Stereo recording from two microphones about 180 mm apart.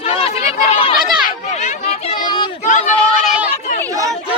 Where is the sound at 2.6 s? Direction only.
45° left (ahead or behind).